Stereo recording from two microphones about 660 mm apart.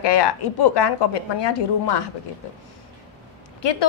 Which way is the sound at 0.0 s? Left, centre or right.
Left.